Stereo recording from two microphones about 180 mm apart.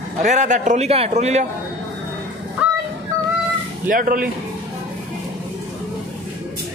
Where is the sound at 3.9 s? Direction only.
50° right (ahead or behind).